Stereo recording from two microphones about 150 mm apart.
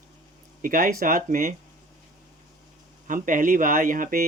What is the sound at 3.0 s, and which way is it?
Speech, 60° right (ahead or behind).